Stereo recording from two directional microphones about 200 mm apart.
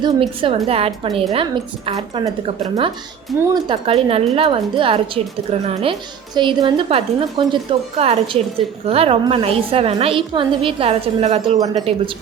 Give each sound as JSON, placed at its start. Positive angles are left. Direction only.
{"t": 0.0, "sound": "a woman's voice", "side_deg": -25}
{"t": 3.3, "sound": "a woman's voice", "side_deg": -20}
{"t": 11.5, "sound": "a woman's voice", "side_deg": -20}